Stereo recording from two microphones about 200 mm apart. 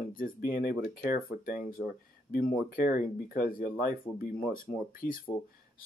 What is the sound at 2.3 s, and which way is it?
Speech, 45° left (ahead or behind).